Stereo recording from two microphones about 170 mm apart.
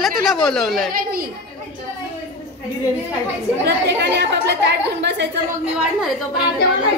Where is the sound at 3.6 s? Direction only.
85° right.